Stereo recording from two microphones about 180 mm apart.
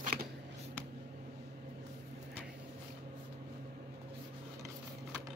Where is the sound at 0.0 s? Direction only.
55° right (ahead or behind).